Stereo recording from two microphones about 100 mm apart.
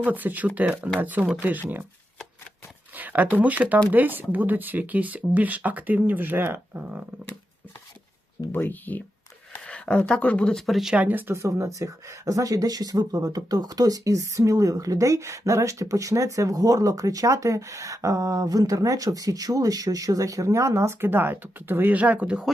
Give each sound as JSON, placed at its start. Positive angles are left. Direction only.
{"t": 0.0, "sound": "speech", "side_deg": -20}
{"t": 2.9, "sound": "speech", "side_deg": -15}
{"t": 8.5, "sound": "speech", "side_deg": 20}
{"t": 11.0, "sound": "speech", "side_deg": -20}